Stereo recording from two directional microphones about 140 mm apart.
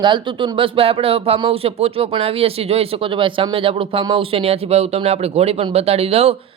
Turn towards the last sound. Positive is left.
turn(degrees=-45)  # may be behind; listen again after turning